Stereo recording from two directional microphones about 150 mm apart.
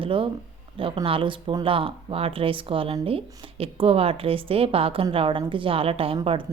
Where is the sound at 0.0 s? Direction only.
35° right (ahead or behind).